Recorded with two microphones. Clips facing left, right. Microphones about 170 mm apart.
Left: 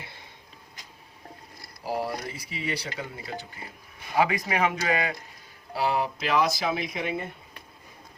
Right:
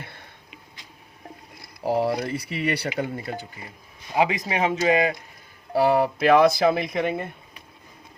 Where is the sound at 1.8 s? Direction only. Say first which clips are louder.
Right 7 dB; 65° right (ahead or behind).